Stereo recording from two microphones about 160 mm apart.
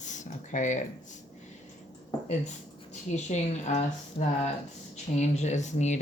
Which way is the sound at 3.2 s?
45° left (ahead or behind).